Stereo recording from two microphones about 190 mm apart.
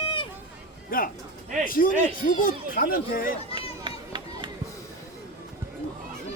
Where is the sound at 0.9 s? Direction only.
50° left (ahead or behind).